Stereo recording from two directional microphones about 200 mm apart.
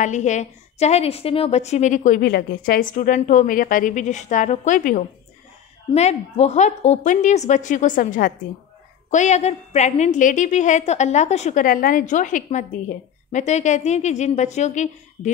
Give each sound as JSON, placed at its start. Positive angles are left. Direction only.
{"t": 0.0, "sound": "a woman's voice", "side_deg": 35}